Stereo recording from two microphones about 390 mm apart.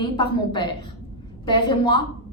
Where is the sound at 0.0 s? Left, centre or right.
Centre.